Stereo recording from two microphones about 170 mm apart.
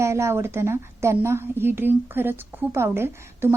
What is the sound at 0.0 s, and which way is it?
A woman's voice, 15° right (ahead or behind).